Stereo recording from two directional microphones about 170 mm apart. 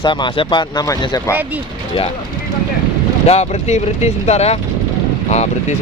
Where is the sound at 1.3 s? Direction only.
10° right (ahead or behind).